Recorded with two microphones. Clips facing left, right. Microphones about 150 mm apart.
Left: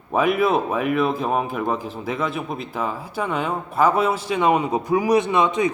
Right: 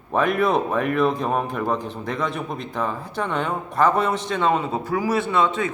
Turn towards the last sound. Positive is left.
turn(degrees=15)  # may be behind; listen again after turning